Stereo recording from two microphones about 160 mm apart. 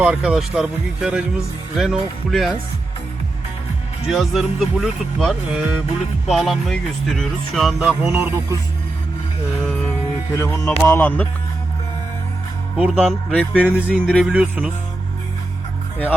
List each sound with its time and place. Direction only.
0.0 s speech: 5° right (ahead or behind)
4.1 s speech: centre (ahead or behind)
10.3 s speech: 15° left (ahead or behind)
12.7 s speech: 5° right (ahead or behind)
13.1 s speech: 10° left (ahead or behind)
13.7 s speech: 10° right (ahead or behind)